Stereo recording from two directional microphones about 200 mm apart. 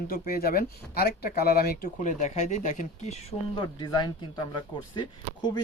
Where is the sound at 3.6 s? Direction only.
20° left (ahead or behind).